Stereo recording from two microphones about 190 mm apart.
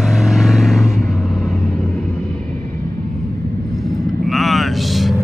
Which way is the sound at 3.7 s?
Centre (ahead or behind).